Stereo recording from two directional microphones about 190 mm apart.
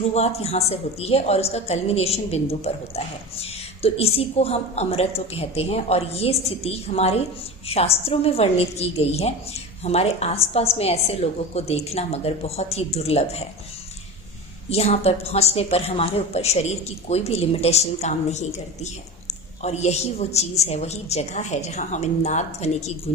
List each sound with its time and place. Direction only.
0.0 s a woman's voice: 35° left (ahead or behind)
14.7 s a woman's voice: 35° left (ahead or behind)